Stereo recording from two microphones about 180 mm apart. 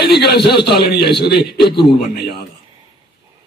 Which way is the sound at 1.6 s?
25° left (ahead or behind).